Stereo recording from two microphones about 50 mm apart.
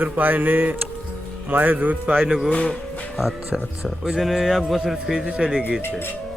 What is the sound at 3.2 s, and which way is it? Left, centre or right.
Speech, centre.